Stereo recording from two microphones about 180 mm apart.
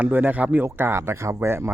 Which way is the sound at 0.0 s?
10° right (ahead or behind).